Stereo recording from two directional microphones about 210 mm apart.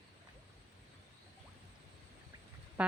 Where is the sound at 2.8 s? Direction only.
5° right (ahead or behind).